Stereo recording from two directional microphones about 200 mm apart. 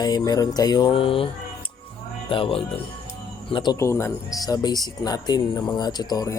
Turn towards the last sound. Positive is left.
turn(degrees=20)  # may be behind; listen again after turning